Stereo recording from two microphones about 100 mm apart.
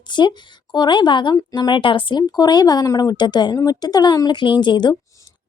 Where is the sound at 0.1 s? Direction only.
50° left (ahead or behind).